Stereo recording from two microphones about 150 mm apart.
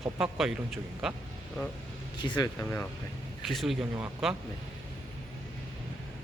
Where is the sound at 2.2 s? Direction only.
30° left (ahead or behind).